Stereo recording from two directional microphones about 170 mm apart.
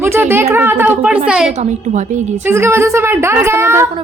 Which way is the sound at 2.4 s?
15° right (ahead or behind).